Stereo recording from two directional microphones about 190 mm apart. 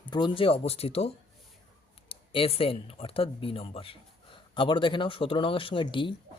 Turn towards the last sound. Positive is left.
turn(degrees=25)  # may be behind; listen again after turning